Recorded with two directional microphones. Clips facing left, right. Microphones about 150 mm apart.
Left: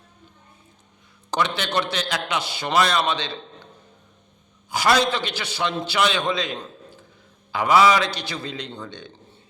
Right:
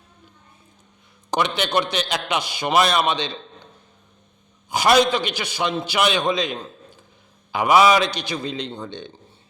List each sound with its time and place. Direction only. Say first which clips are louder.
1.3 s a man's voice: right 2 dB; 15° right (ahead or behind)
4.7 s a man's voice: right 3 dB; 20° right (ahead or behind)